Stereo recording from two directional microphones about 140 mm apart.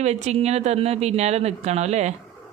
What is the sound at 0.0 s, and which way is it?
Speech, 55° right (ahead or behind).